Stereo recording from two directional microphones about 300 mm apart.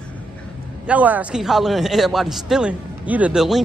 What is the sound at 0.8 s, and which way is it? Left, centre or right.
A man's voice, centre.